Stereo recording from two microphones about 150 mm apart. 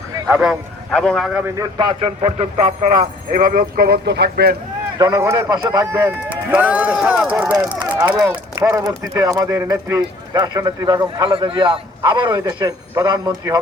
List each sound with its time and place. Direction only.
0.3 s a man's voice: 10° right (ahead or behind)
0.9 s speech: 5° left (ahead or behind)
1.3 s a man's voice: 15° right (ahead or behind)
1.8 s a man's voice: 35° right (ahead or behind); by 4.5 s 90° right
4.9 s a man's voice: 20° right (ahead or behind)